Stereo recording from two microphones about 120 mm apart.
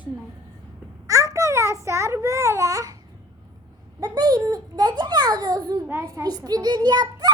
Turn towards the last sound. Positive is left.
turn(degrees=-35)  # may be behind; listen again after turning